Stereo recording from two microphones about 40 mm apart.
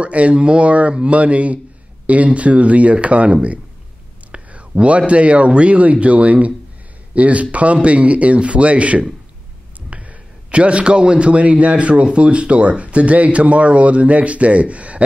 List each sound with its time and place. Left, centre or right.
0.0 s a man's voice: right